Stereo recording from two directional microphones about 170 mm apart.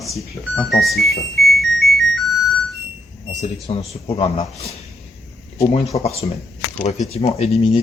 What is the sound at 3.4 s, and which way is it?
Speech, 35° left (ahead or behind).